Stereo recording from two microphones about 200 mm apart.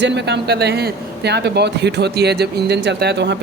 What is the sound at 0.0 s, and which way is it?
Speech, 60° right (ahead or behind).